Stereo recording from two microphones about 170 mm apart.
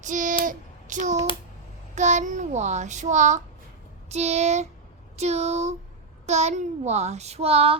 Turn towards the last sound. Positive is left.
turn(degrees=-35)  # may be behind; listen again after turning